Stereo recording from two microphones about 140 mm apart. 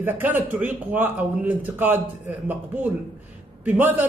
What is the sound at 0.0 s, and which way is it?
A man's voice, 15° right (ahead or behind).